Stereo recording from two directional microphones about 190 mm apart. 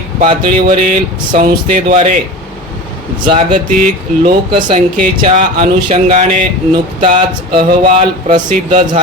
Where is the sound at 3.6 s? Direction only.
45° right (ahead or behind).